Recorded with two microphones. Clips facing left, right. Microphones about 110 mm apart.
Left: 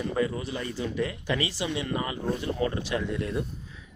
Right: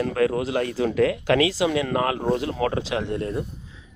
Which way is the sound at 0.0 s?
80° right.